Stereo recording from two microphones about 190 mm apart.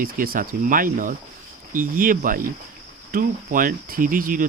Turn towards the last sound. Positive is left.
turn(degrees=-45)  # may be behind; listen again after turning